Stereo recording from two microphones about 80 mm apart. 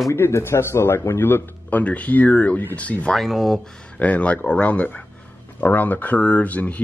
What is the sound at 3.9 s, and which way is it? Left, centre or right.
Speech, centre.